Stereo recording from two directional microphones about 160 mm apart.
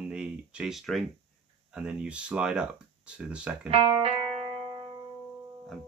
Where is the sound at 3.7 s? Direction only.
35° right (ahead or behind).